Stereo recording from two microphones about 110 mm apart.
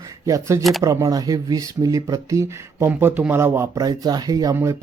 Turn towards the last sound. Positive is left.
turn(degrees=-25)  # may be behind; listen again after turning